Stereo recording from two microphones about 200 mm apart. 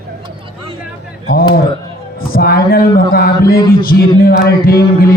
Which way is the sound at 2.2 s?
45° left (ahead or behind).